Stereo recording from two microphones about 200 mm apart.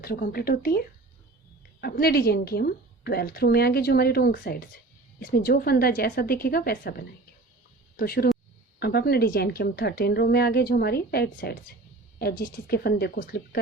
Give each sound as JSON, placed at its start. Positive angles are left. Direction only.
{"t": 0.0, "sound": "a woman's voice", "side_deg": 50}